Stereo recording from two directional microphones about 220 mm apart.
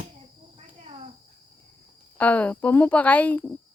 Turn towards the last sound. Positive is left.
turn(degrees=5)  # may be behind; listen again after turning